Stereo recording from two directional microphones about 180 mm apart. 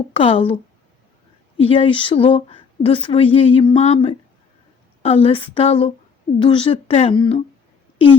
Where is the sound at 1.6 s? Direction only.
30° left (ahead or behind).